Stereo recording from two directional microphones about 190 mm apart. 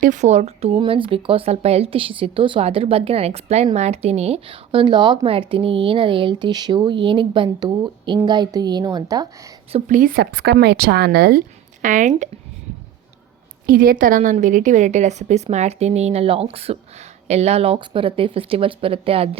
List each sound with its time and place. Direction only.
0.0 s a woman's voice: 40° right (ahead or behind); by 9.2 s 20° right (ahead or behind)
9.7 s speech: 40° right (ahead or behind)
13.7 s a woman's voice: 50° right (ahead or behind); by 19.4 s 30° right (ahead or behind)